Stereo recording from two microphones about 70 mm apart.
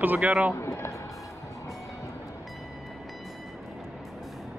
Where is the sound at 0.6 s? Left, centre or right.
Left.